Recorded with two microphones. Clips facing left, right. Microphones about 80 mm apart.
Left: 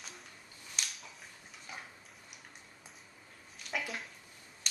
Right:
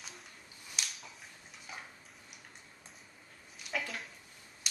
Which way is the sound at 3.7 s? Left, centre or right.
Centre.